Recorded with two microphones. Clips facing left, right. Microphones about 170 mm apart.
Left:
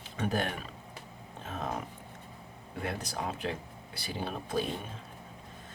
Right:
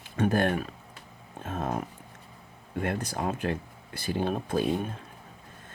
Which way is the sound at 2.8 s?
50° right (ahead or behind).